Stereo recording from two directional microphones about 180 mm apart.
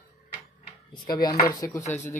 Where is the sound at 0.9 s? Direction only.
25° left (ahead or behind).